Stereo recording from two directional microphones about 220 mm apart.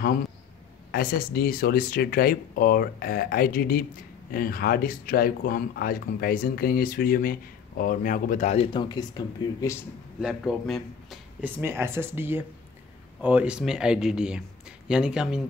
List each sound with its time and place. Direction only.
0.9 s speech: 40° left (ahead or behind)
8.7 s speech: 20° left (ahead or behind)
10.2 s speech: centre (ahead or behind)